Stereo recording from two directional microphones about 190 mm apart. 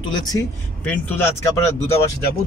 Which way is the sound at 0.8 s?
10° left (ahead or behind).